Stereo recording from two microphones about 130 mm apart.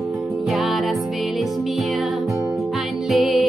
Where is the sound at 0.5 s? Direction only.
Centre (ahead or behind).